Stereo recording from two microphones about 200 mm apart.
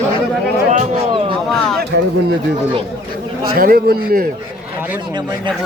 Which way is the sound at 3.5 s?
50° right (ahead or behind).